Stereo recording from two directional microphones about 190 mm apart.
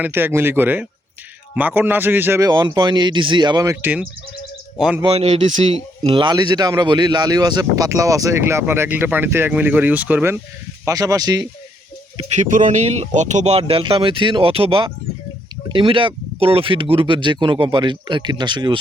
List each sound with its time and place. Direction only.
0.0 s a man's voice: 10° right (ahead or behind)
5.0 s a man's voice: 35° right (ahead or behind)
12.1 s speech: 40° right (ahead or behind); by 18.8 s 25° right (ahead or behind)